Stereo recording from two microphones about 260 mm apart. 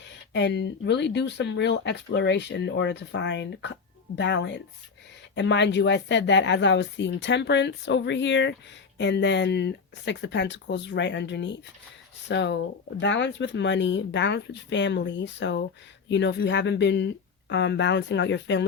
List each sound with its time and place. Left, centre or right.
0.3 s speech: left